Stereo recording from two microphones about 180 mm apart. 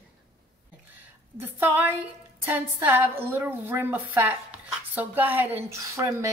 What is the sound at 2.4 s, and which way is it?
A woman's voice, 10° right (ahead or behind).